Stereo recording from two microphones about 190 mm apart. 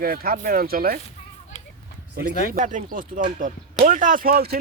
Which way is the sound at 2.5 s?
40° right (ahead or behind).